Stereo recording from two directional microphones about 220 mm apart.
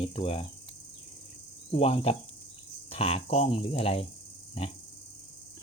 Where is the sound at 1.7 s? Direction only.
25° left (ahead or behind).